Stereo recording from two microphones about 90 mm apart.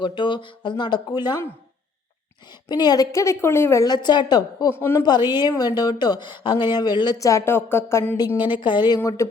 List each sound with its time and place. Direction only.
0.0 s speech: 60° left (ahead or behind)
2.6 s a woman's voice: 50° left (ahead or behind)
3.1 s a woman's voice: 35° left (ahead or behind)
3.8 s a woman's voice: 50° left (ahead or behind)
4.7 s a woman's voice: 25° left (ahead or behind)
5.0 s a woman's voice: 50° left (ahead or behind)
7.2 s a woman's voice: 35° left (ahead or behind)
8.4 s speech: 60° left (ahead or behind)